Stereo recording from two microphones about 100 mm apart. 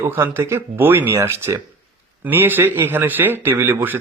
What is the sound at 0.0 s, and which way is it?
Speech, 25° right (ahead or behind).